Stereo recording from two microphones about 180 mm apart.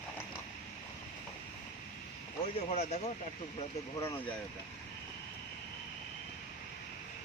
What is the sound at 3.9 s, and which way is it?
Speech, 15° left (ahead or behind).